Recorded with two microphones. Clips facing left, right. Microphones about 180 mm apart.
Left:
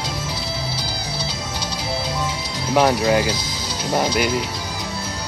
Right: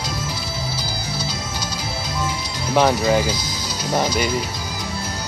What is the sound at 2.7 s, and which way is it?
Speech, centre (ahead or behind).